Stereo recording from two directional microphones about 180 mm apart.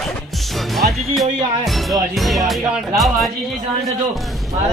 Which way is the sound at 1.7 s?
Centre (ahead or behind).